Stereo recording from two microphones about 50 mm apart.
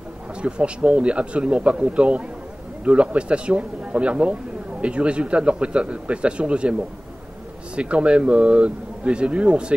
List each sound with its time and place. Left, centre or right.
0.4 s speech: right